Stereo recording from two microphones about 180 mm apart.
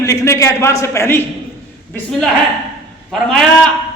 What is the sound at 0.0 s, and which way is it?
A man's voice, 20° left (ahead or behind).